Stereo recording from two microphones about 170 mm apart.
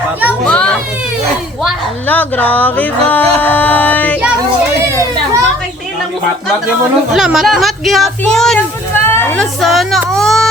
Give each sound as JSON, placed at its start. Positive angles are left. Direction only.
{"t": 0.4, "sound": "children playing", "side_deg": 5}
{"t": 2.0, "sound": "music", "side_deg": 10}
{"t": 7.1, "sound": "speech", "side_deg": 0}
{"t": 9.0, "sound": "snake", "side_deg": 15}
{"t": 9.4, "sound": "speech", "side_deg": 0}
{"t": 10.1, "sound": "a sound", "side_deg": 0}